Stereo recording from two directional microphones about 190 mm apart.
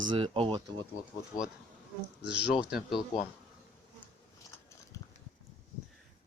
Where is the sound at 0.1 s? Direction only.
30° right (ahead or behind).